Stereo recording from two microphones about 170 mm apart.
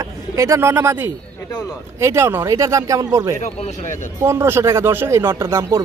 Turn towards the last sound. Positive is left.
turn(degrees=-20)  # may be behind; listen again after turning